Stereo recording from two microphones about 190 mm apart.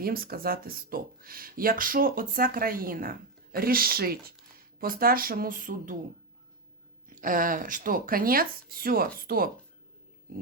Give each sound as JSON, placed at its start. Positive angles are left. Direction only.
{"t": 0.0, "sound": "speech", "side_deg": -50}
{"t": 7.2, "sound": "speech", "side_deg": -45}